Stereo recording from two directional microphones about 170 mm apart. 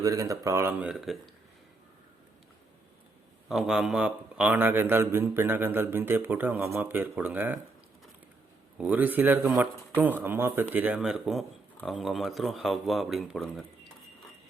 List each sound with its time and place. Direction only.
0.0 s speech: 20° right (ahead or behind)
0.8 s speech: 5° right (ahead or behind)
3.5 s a man's voice: centre (ahead or behind)
8.8 s a man's voice: 10° right (ahead or behind)